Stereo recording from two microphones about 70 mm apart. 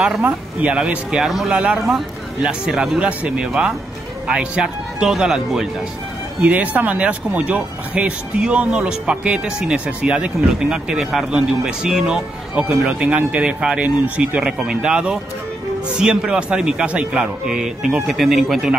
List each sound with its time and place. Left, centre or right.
0.2 s speech: right
0.7 s speech: centre
3.0 s speech: centre
6.4 s speech: right; by 18.8 s centre